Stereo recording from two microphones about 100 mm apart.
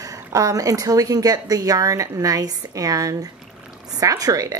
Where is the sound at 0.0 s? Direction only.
35° right (ahead or behind).